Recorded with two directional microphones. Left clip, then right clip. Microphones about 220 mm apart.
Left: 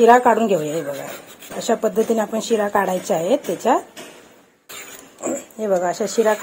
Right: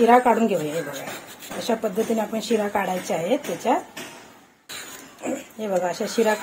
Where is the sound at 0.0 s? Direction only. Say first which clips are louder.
Left 4 dB; 35° left (ahead or behind).